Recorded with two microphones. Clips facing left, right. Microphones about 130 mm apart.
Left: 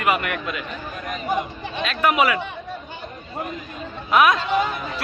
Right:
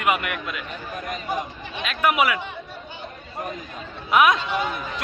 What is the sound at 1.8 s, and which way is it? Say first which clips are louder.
Speech: left 2 dB; 10° right (ahead or behind).